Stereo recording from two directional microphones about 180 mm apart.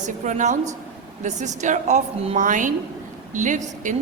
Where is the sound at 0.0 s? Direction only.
45° right (ahead or behind).